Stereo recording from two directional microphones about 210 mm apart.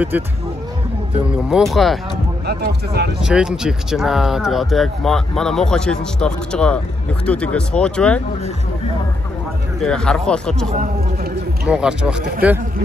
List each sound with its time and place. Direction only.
0.1 s speech: 10° right (ahead or behind)
1.3 s speech: centre (ahead or behind)
2.4 s speech: 50° right (ahead or behind)
3.2 s speech: 5° right (ahead or behind)
9.8 s speech: 5° left (ahead or behind)